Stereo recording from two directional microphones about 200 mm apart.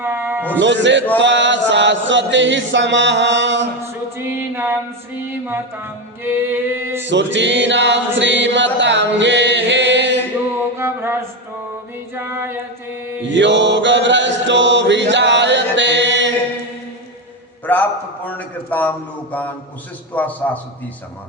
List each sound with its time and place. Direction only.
0.0 s music: 10° right (ahead or behind)
0.6 s chant: 65° right (ahead or behind)
4.4 s music: 10° right (ahead or behind)
5.3 s mantra: 10° right (ahead or behind)
7.1 s chant: 60° right (ahead or behind)
10.8 s music: 10° right (ahead or behind)
12.1 s a capella: 10° right (ahead or behind)
13.2 s mantra: 60° right (ahead or behind)
17.7 s a sound: 10° left (ahead or behind)
18.3 s a man's voice: 10° left (ahead or behind)